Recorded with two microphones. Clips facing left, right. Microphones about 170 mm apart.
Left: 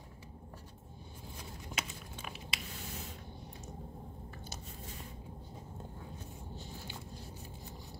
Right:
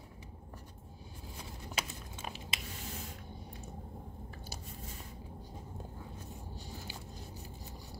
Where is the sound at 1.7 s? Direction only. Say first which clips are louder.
Right 2 dB; 30° right (ahead or behind).